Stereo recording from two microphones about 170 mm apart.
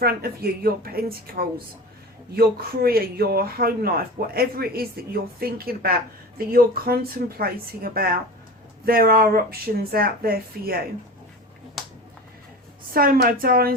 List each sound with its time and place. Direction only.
0.0 s speech: 65° right (ahead or behind)
11.8 s finger snapping: centre (ahead or behind)
12.9 s speech: 60° right (ahead or behind)